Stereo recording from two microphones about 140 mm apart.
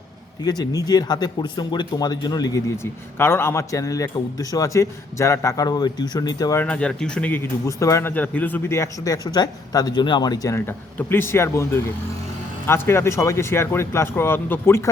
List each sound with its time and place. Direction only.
0.4 s speech: 30° left (ahead or behind)
6.6 s speech: 10° left (ahead or behind)
7.7 s speech: 20° left (ahead or behind)